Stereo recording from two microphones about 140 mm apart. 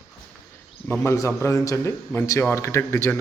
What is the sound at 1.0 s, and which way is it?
Speech, 20° left (ahead or behind).